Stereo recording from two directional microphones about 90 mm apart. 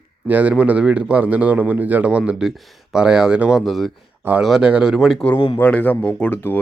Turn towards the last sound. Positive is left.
turn(degrees=15)  # may be behind; listen again after turning